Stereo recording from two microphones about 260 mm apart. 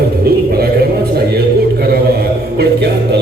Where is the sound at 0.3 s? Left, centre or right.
Right.